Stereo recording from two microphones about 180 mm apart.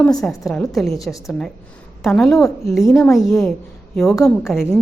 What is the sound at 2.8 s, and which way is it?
Speech, 15° left (ahead or behind).